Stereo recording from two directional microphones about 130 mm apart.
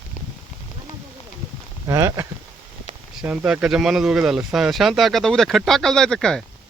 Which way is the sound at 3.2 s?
10° right (ahead or behind).